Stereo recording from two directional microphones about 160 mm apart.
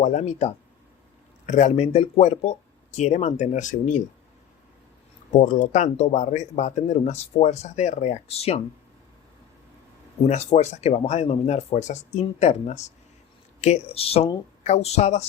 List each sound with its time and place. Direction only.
0.0 s speech: 50° left (ahead or behind)
5.3 s speech: 50° left (ahead or behind)
10.2 s speech: 45° left (ahead or behind)